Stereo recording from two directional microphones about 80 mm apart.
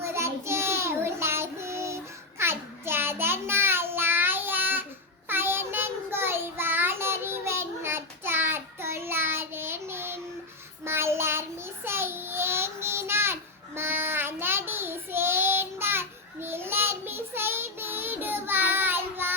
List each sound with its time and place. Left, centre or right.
0.0 s child singing: right